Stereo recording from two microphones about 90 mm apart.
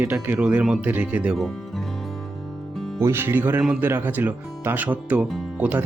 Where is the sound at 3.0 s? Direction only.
30° right (ahead or behind).